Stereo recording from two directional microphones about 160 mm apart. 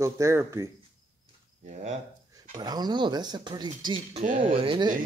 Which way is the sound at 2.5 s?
25° right (ahead or behind).